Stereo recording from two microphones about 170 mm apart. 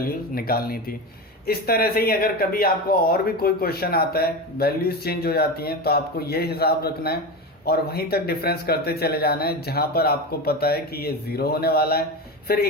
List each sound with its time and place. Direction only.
0.0 s speech: 60° left (ahead or behind)